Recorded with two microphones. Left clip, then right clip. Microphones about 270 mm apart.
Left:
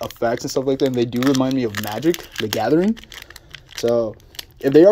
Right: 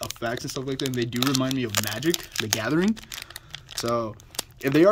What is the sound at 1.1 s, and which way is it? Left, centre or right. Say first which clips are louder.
Speech: left 6 dB; right.